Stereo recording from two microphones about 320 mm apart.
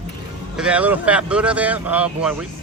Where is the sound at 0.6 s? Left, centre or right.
Centre.